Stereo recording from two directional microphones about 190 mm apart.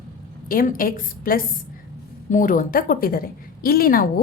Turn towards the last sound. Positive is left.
turn(degrees=50)  # may be behind; listen again after turning